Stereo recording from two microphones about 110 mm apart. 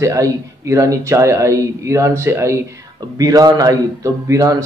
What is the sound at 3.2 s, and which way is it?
Speech, 35° right (ahead or behind).